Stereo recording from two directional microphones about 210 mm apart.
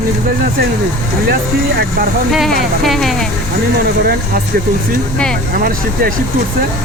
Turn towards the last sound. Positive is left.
turn(degrees=-45)  # may be behind; listen again after turning